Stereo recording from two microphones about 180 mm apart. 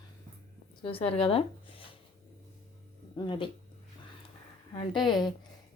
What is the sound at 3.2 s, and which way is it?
Speech, 25° left (ahead or behind).